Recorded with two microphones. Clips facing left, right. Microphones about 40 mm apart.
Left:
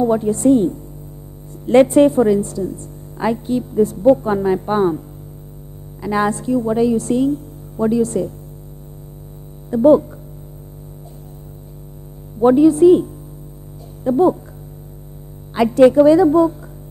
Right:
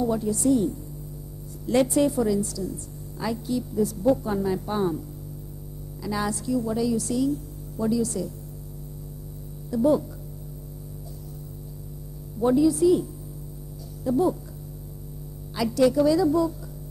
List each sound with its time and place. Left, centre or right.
0.0 s a woman's voice: left
6.0 s a woman's voice: left
9.7 s speech: left
12.4 s a woman's voice: left
15.5 s a woman's voice: left